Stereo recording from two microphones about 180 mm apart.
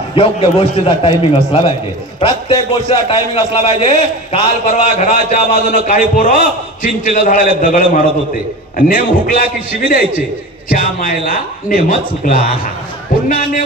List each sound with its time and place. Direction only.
0.1 s a man's voice: 30° left (ahead or behind); by 9.4 s 50° left (ahead or behind)
10.8 s speech: 45° left (ahead or behind)